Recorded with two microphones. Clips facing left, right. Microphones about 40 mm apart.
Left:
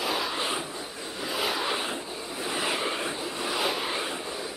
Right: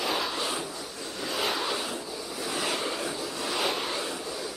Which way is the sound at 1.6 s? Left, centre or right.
Left.